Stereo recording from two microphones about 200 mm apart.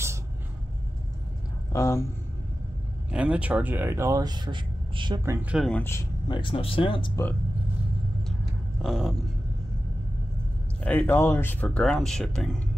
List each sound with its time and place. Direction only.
1.7 s speech: 15° left (ahead or behind)
3.1 s speech: 5° right (ahead or behind)
5.7 s speech: 10° left (ahead or behind); by 7.1 s 25° left (ahead or behind)
8.8 s a sound: centre (ahead or behind)
10.8 s speech: 10° left (ahead or behind)